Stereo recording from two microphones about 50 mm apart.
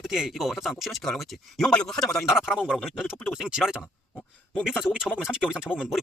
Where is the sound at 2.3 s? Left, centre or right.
Centre.